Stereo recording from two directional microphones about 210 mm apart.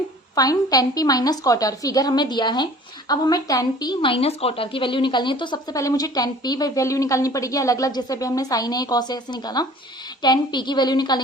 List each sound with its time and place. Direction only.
0.3 s a woman's voice: 20° left (ahead or behind)